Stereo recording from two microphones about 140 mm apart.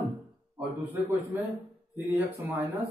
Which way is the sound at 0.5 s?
15° right (ahead or behind).